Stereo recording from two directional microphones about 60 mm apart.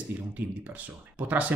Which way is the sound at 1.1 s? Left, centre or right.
Right.